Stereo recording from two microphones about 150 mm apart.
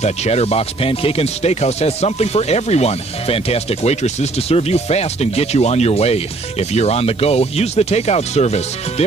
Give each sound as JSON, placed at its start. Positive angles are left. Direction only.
{"t": 0.0, "sound": "speech", "side_deg": 45}